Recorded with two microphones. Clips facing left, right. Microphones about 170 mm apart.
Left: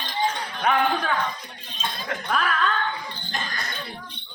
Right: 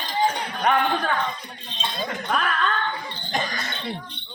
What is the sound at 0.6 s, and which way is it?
Speech, 5° left (ahead or behind).